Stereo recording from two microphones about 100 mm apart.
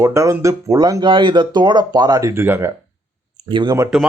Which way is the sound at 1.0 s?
55° right (ahead or behind).